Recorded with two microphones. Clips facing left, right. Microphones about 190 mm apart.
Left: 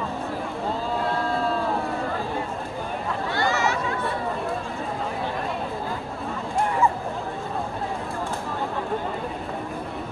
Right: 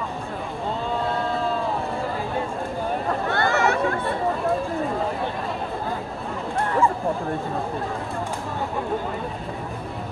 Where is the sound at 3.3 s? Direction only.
55° right (ahead or behind).